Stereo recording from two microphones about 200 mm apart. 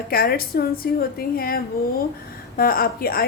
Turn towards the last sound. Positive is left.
turn(degrees=50)  # may be behind; listen again after turning